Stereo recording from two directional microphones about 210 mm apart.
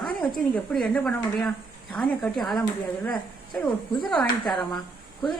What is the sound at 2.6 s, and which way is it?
Speech, 15° left (ahead or behind).